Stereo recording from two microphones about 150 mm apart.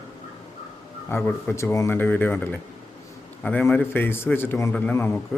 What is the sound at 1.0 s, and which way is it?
Speech, 15° left (ahead or behind).